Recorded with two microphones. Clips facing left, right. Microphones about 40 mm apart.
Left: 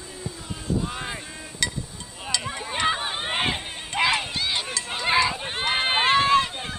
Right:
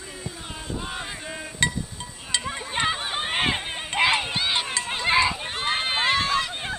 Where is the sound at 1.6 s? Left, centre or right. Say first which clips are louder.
Right 4 dB; right.